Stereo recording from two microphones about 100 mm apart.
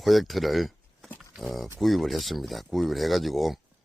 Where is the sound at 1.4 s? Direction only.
Centre (ahead or behind).